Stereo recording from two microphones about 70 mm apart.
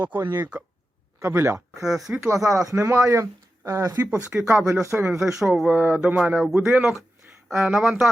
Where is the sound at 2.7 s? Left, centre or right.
Right.